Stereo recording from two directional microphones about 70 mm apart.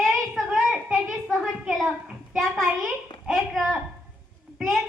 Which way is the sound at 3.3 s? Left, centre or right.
Centre.